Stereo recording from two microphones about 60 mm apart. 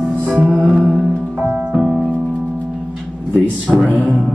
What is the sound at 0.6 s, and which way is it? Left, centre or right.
Music, centre.